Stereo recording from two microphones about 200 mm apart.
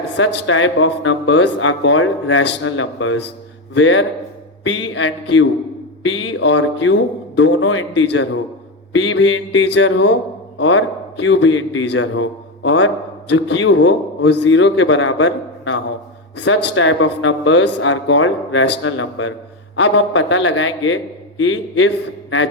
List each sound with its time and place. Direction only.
0.2 s a man's voice: 75° left (ahead or behind)